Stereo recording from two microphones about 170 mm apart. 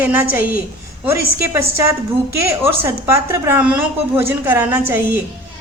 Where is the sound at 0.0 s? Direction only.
10° right (ahead or behind).